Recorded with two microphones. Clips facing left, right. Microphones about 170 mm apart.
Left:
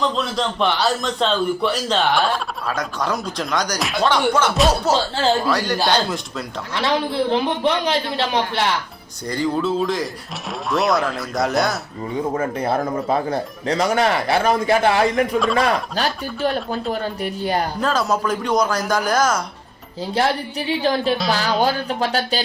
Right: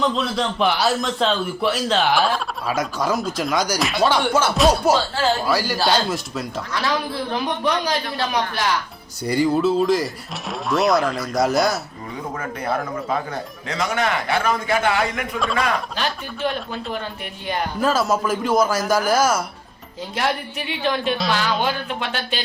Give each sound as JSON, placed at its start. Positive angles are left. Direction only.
{"t": 0.0, "sound": "a man's voice", "side_deg": 0}
{"t": 6.8, "sound": "a man's voice", "side_deg": 25}
{"t": 9.2, "sound": "a man's voice", "side_deg": -10}
{"t": 12.3, "sound": "speech", "side_deg": 30}
{"t": 17.7, "sound": "a man's voice", "side_deg": -5}
{"t": 20.1, "sound": "speech", "side_deg": 35}